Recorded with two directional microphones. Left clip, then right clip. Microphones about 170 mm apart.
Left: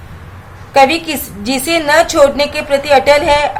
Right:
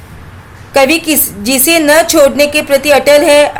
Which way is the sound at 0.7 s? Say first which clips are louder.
Right 1 dB; 40° right (ahead or behind).